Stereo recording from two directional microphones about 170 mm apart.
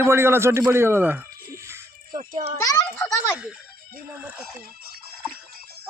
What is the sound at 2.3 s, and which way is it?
Speech, 50° right (ahead or behind).